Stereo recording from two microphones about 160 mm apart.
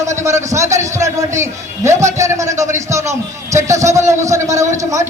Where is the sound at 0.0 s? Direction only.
20° right (ahead or behind).